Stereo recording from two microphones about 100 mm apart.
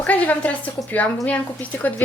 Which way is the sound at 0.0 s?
15° left (ahead or behind).